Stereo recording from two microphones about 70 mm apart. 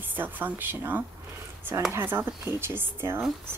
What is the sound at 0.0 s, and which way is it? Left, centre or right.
A woman's voice, right.